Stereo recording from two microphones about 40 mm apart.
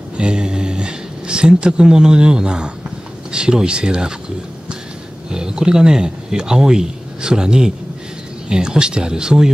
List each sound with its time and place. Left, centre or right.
0.2 s a sound: right
3.3 s speech: right
5.3 s speech: centre